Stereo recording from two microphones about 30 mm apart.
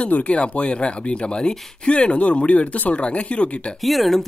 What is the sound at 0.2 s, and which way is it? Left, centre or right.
Speech, left.